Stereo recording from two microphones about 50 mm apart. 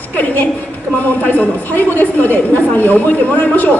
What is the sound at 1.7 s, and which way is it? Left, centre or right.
A woman's voice, left.